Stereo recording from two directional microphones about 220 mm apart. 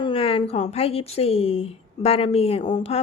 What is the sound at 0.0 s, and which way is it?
A woman's voice, 25° left (ahead or behind).